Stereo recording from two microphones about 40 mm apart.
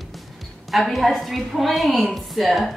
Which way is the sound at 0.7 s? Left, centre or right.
Centre.